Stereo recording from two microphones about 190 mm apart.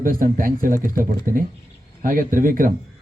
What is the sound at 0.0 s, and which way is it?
Speech, 45° right (ahead or behind).